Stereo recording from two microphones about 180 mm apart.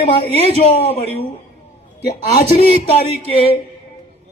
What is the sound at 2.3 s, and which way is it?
A man's voice, 35° left (ahead or behind).